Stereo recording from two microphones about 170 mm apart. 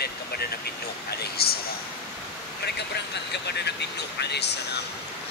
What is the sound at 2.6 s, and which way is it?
Speech, 75° left (ahead or behind).